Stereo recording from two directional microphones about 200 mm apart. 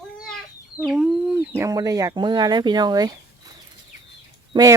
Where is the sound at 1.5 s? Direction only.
15° right (ahead or behind).